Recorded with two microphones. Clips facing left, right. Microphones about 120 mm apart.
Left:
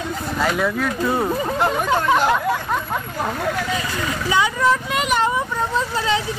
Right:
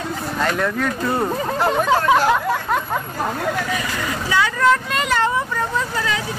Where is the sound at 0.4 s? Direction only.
5° left (ahead or behind).